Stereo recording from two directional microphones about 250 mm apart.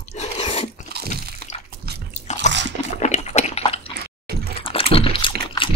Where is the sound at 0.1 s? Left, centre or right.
Left.